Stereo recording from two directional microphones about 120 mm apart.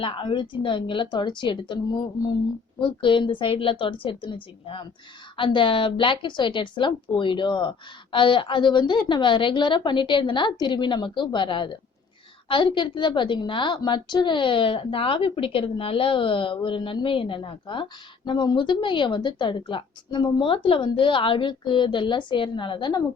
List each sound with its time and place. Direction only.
0.0 s a woman's voice: 45° left (ahead or behind)